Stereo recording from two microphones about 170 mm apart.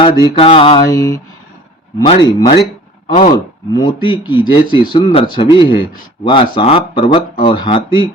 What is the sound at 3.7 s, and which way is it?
A man's voice, 30° left (ahead or behind).